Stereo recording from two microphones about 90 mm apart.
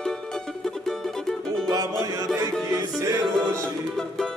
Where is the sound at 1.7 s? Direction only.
40° right (ahead or behind).